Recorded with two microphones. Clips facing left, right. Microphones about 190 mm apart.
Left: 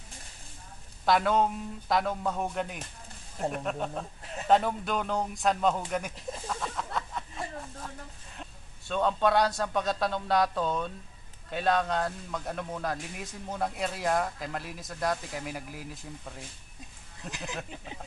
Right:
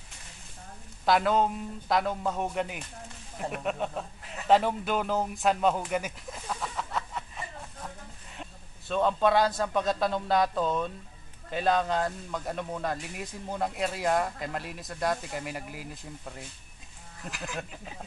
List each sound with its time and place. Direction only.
1.0 s speech: centre (ahead or behind)
8.4 s a man's voice: centre (ahead or behind)
17.3 s speech: 20° left (ahead or behind)